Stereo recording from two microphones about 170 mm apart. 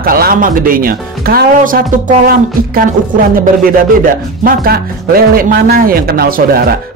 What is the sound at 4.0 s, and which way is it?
Speech, 55° right (ahead or behind).